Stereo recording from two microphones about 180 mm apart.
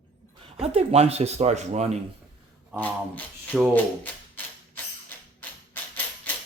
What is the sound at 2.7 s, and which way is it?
Speech, 10° left (ahead or behind).